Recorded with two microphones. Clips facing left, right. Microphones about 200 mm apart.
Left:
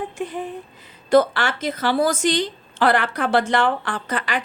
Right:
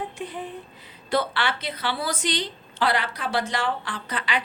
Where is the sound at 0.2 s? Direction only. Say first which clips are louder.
Left 5 dB; 45° left (ahead or behind).